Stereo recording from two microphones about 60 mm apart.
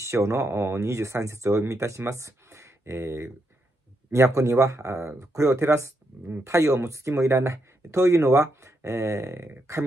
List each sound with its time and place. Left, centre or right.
0.0 s speech: right